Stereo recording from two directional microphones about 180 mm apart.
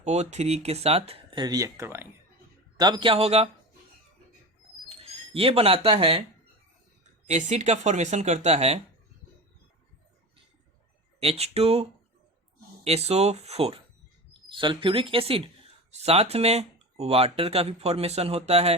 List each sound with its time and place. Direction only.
0.0 s speech: 40° right (ahead or behind)
4.9 s speech: 35° right (ahead or behind)
11.2 s speech: 35° right (ahead or behind)